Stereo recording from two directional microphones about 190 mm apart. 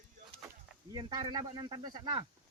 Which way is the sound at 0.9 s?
25° right (ahead or behind).